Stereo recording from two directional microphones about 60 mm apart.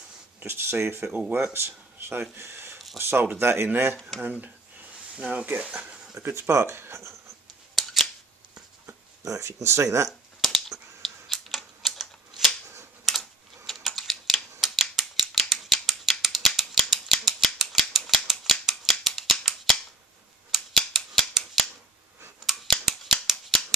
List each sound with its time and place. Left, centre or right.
0.5 s speech: right
2.3 s a sound: right
3.0 s speech: right
6.2 s speech: right
7.7 s scissors: centre
9.2 s speech: right
9.5 s speech: right
10.0 s a sound: centre
11.0 s typewriter: centre
19.4 s cap gun: centre
20.5 s scissors: centre